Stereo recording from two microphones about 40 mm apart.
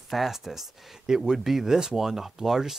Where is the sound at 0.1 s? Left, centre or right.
Centre.